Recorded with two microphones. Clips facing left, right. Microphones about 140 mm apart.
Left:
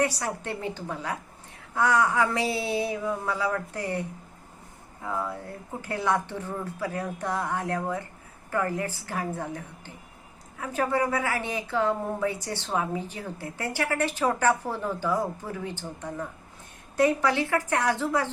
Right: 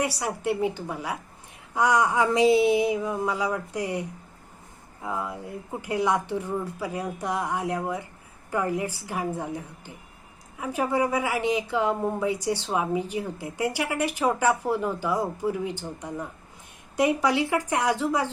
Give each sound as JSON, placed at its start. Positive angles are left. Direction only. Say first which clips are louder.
{"t": 0.0, "sound": "a woman's voice", "louder": "even", "side_deg": -15}
{"t": 5.0, "sound": "a woman's voice", "louder": "even", "side_deg": -15}